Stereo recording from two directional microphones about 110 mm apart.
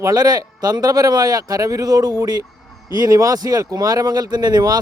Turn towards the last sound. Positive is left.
turn(degrees=-35)  # may be behind; listen again after turning